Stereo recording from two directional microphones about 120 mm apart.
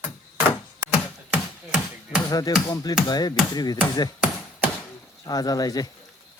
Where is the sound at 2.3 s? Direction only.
30° left (ahead or behind).